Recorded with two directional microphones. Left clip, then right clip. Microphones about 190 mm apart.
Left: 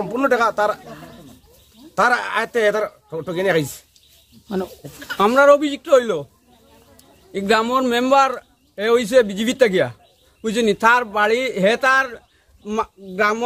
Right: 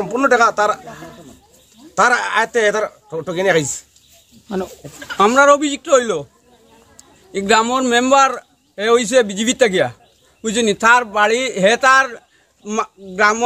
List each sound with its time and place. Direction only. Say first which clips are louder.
0.0 s a man's voice: right 4 dB; 5° right (ahead or behind)
5.1 s a man's voice: right 2 dB; centre (ahead or behind)
7.3 s a man's voice: right 3 dB; 5° right (ahead or behind)